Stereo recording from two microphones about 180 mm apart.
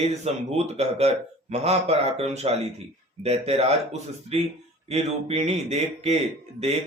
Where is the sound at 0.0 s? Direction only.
40° right (ahead or behind).